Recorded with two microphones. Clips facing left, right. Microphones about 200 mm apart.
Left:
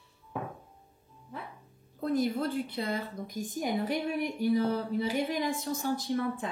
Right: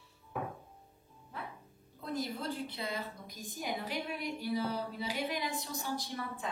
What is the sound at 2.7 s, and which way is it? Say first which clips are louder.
A woman's voice: left 6 dB; 55° left (ahead or behind).